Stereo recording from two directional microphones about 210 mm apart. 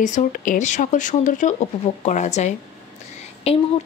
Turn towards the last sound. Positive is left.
turn(degrees=30)  # may be behind; listen again after turning